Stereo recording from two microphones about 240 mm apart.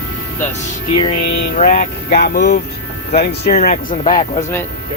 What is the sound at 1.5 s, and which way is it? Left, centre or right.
Speech, left.